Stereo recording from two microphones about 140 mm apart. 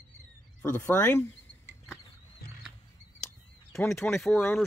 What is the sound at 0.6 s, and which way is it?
Speech, 15° left (ahead or behind).